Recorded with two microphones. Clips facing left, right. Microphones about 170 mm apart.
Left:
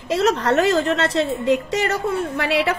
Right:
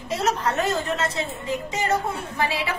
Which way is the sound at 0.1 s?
80° left.